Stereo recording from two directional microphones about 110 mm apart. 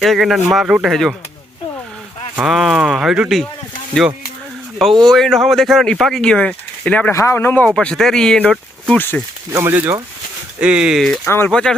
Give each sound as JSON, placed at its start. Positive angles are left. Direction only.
{"t": 0.0, "sound": "speech", "side_deg": 0}
{"t": 2.3, "sound": "speech", "side_deg": -5}
{"t": 5.0, "sound": "speech", "side_deg": 5}
{"t": 7.1, "sound": "speech", "side_deg": 25}
{"t": 7.7, "sound": "speech", "side_deg": 5}
{"t": 9.5, "sound": "speech", "side_deg": -20}
{"t": 11.3, "sound": "speech", "side_deg": 20}
{"t": 11.5, "sound": "speech", "side_deg": 10}